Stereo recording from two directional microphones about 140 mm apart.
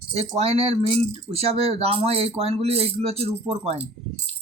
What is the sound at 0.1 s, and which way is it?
Speech, 50° right (ahead or behind).